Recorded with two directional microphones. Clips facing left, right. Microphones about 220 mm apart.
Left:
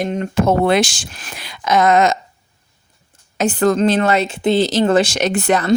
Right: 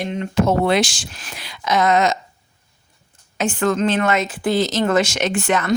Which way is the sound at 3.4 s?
35° left (ahead or behind).